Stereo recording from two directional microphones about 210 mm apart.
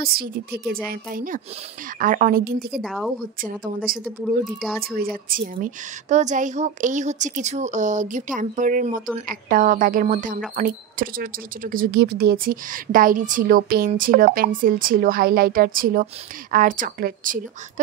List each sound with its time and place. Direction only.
0.0 s a woman's voice: 45° right (ahead or behind)
2.8 s speech: centre (ahead or behind)
3.3 s a woman's voice: 40° right (ahead or behind)